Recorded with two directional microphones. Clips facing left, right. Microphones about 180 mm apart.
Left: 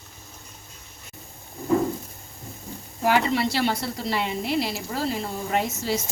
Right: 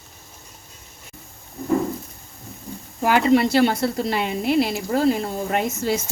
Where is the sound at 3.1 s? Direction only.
50° right (ahead or behind).